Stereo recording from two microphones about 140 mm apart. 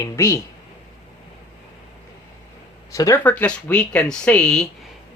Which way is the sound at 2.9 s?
25° left (ahead or behind).